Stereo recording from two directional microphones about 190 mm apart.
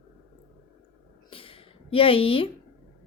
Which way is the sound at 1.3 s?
30° left (ahead or behind).